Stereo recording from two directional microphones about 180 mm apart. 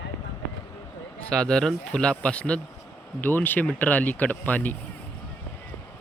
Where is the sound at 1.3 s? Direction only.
5° left (ahead or behind).